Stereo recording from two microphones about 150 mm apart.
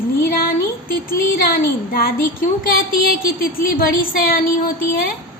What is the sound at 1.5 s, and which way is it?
Speech, 80° left.